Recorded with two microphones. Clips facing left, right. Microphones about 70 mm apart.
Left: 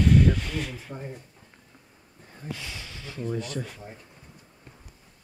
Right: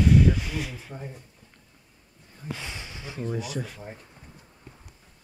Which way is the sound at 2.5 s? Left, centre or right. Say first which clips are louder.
Right 2 dB; right.